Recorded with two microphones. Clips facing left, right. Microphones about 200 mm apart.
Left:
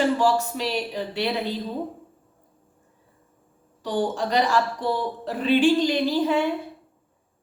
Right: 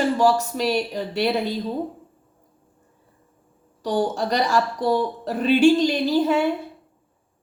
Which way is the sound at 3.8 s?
40° right (ahead or behind).